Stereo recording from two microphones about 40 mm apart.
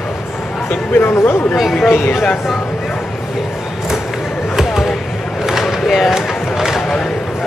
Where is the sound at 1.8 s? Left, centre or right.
Left.